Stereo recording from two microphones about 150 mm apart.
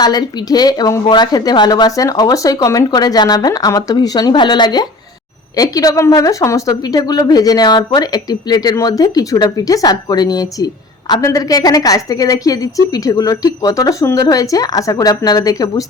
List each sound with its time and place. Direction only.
0.0 s speech: 25° left (ahead or behind)